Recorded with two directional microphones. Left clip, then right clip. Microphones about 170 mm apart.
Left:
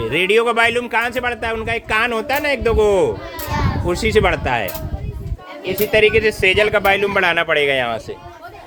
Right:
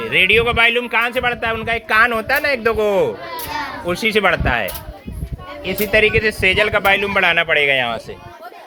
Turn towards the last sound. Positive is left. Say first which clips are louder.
# right 1 dB
turn(degrees=35)  # may be behind; listen again after turning